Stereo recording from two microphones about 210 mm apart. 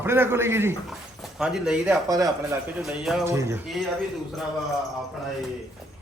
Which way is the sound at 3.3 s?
10° right (ahead or behind).